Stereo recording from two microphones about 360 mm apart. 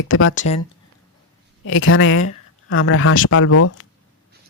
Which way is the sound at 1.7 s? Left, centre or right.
Left.